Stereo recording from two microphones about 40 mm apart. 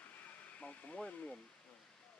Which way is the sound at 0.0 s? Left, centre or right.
Left.